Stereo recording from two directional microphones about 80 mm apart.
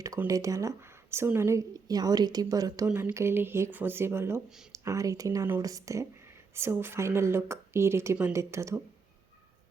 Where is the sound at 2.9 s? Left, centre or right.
Right.